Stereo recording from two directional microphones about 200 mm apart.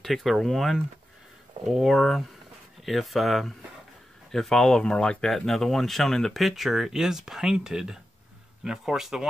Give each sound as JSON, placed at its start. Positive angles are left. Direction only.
{"t": 0.0, "sound": "speech", "side_deg": 0}